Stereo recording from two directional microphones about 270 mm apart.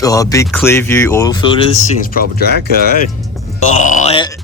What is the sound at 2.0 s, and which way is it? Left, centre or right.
Speech, left.